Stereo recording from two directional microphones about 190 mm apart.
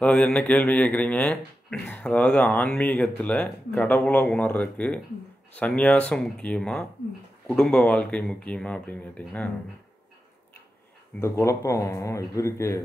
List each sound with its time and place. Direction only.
0.0 s a man's voice: 5° left (ahead or behind)
11.1 s a man's voice: 15° left (ahead or behind)